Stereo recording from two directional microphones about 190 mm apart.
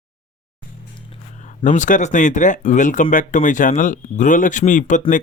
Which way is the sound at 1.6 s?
40° left (ahead or behind).